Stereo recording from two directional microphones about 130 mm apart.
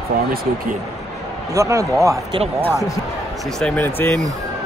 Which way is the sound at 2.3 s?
45° right (ahead or behind).